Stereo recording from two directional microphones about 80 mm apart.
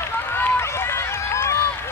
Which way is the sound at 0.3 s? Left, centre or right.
Left.